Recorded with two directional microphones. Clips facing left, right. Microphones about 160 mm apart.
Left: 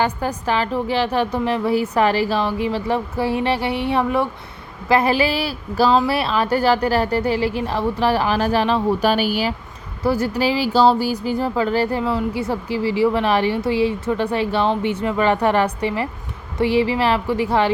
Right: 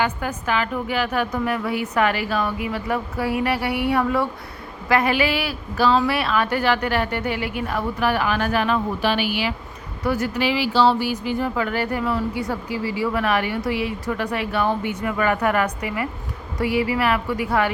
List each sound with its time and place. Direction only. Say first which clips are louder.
0.0 s a woman's voice: left 3 dB; 35° left (ahead or behind)
9.0 s a woman's voice: left 4 dB; 40° left (ahead or behind); by 17.7 s 25° left (ahead or behind)